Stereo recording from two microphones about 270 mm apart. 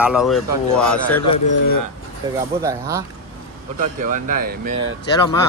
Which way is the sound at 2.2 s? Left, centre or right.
Centre.